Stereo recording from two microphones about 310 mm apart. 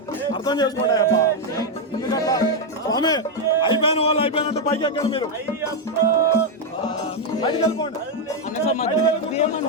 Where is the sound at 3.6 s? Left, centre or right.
Centre.